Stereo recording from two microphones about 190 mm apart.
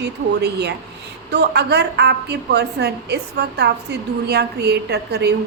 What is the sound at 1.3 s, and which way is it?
A woman's voice, 60° right (ahead or behind).